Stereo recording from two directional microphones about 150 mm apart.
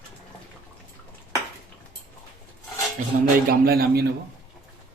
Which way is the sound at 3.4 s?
90° right.